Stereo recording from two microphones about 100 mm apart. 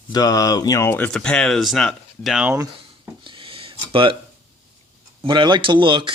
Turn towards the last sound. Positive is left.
turn(degrees=-55)  # may be behind; listen again after turning